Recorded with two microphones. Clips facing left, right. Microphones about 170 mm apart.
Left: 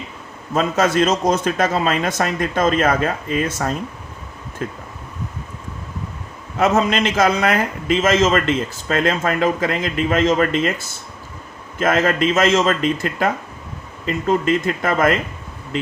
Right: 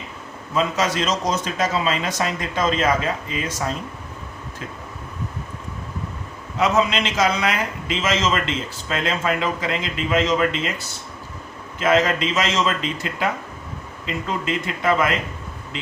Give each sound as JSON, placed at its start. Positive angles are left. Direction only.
{"t": 0.5, "sound": "a man's voice", "side_deg": 50}
{"t": 6.6, "sound": "a man's voice", "side_deg": 50}